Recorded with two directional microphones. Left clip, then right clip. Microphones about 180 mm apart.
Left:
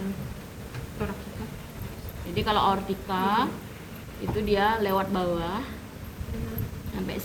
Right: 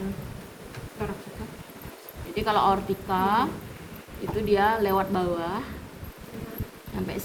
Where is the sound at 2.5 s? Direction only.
45° right (ahead or behind).